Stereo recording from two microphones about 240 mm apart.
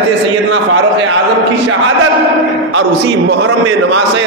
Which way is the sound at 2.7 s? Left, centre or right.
Right.